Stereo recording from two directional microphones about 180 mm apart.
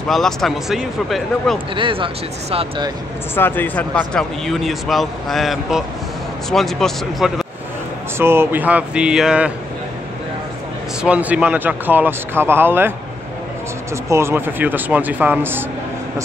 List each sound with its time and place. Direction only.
0.1 s speech: centre (ahead or behind)
1.8 s speech: 30° right (ahead or behind)
3.3 s speech: 10° left (ahead or behind)
8.2 s speech: 15° right (ahead or behind)
11.0 s speech: 5° right (ahead or behind)
14.0 s speech: 15° right (ahead or behind)